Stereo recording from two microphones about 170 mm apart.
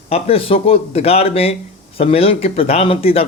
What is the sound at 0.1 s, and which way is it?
Speech, 35° left (ahead or behind).